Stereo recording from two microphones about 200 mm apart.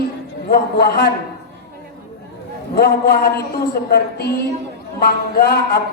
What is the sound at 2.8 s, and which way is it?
A woman's voice, 50° left (ahead or behind).